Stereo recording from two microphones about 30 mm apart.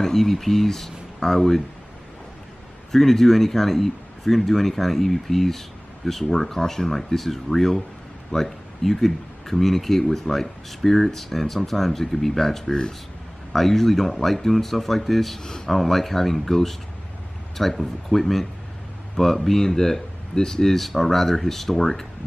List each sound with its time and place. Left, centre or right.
0.0 s speech: centre
2.9 s speech: centre
6.9 s speech: centre
15.4 s speech: left
15.7 s speech: centre
20.7 s speech: centre